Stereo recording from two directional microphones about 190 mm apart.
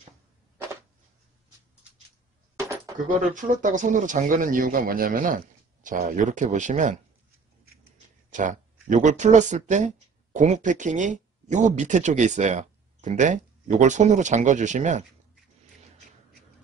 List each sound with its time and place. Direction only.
3.1 s speech: 40° right (ahead or behind)
8.3 s speech: 40° right (ahead or behind)